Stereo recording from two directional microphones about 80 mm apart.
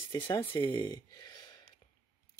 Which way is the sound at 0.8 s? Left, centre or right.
Left.